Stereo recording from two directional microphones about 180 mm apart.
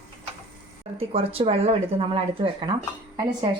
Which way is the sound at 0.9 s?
30° right (ahead or behind).